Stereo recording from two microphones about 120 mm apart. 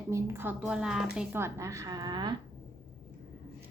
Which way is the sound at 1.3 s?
25° right (ahead or behind).